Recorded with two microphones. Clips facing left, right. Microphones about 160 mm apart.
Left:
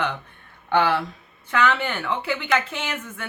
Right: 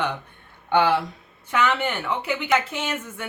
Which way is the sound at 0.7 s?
20° right (ahead or behind).